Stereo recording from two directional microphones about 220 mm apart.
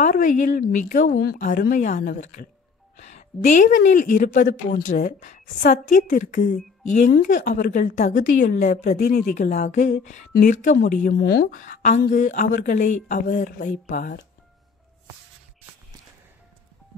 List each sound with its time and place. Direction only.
0.0 s a woman's voice: 35° left (ahead or behind)